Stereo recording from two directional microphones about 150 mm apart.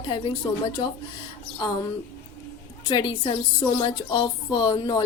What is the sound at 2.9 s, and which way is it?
A woman's voice, 30° left (ahead or behind).